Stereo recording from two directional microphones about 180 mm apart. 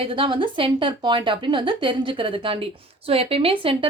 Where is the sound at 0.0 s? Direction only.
30° right (ahead or behind).